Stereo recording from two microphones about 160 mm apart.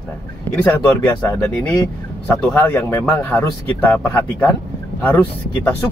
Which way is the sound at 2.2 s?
10° left (ahead or behind).